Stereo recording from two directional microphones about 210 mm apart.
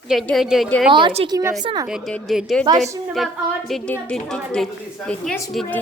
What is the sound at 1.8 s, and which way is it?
A woman's voice, centre (ahead or behind).